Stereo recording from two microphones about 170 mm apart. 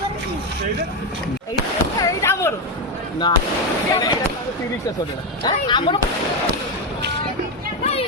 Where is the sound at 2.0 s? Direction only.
15° left (ahead or behind).